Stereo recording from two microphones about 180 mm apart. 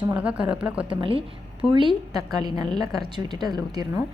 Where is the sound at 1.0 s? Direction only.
30° right (ahead or behind).